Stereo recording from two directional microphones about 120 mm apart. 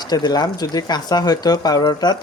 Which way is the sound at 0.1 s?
35° left (ahead or behind).